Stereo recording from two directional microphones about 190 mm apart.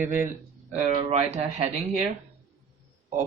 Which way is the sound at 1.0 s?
35° right (ahead or behind).